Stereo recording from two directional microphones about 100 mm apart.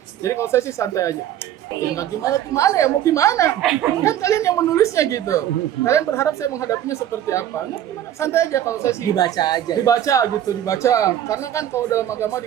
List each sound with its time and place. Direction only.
0.3 s a woman's voice: 25° left (ahead or behind)